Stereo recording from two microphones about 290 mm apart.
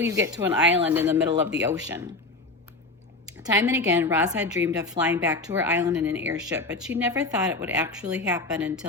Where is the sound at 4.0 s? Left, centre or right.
Centre.